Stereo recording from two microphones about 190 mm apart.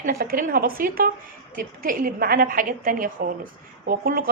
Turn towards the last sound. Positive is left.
turn(degrees=-50)  # may be behind; listen again after turning